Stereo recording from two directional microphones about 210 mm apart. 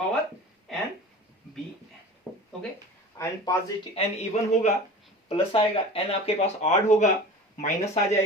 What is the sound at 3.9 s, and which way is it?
Speech, 30° left (ahead or behind).